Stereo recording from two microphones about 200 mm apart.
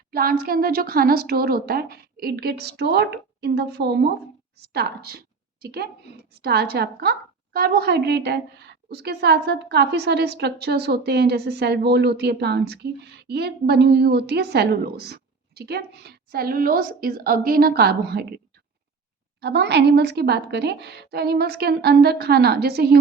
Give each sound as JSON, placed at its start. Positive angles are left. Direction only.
{"t": 0.1, "sound": "a woman's voice", "side_deg": -45}
{"t": 19.4, "sound": "a woman's voice", "side_deg": -55}